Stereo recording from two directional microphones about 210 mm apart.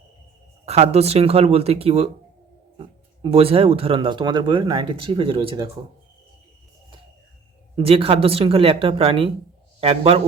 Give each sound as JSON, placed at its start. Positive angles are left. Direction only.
{"t": 0.6, "sound": "speech", "side_deg": -30}
{"t": 7.8, "sound": "speech", "side_deg": -25}